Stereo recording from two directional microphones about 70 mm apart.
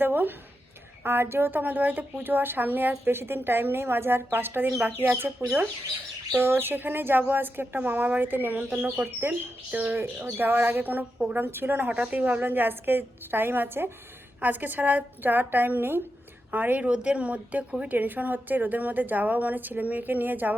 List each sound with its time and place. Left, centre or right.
0.0 s a woman's voice: right
6.3 s a woman's voice: right